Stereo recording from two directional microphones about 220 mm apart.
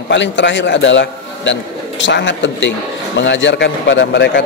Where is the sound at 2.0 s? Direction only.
55° left (ahead or behind).